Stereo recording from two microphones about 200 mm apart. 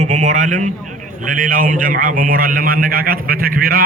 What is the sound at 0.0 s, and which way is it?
A man's voice, 35° right (ahead or behind).